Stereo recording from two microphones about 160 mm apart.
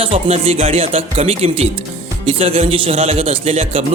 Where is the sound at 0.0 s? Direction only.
40° right (ahead or behind).